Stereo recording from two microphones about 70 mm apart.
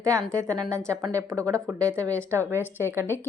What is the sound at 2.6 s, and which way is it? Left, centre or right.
Speech, left.